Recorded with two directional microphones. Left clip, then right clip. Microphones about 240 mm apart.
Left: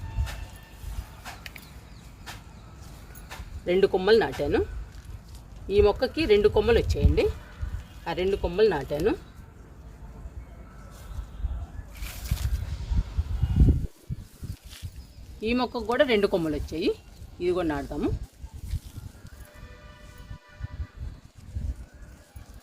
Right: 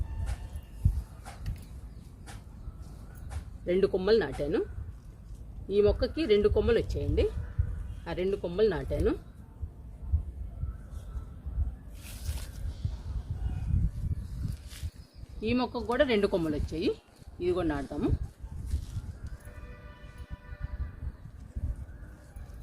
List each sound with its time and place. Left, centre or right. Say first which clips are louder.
3.7 s speech: left 5 dB; centre
5.6 s speech: left 4 dB; centre
15.4 s speech: left 3 dB; centre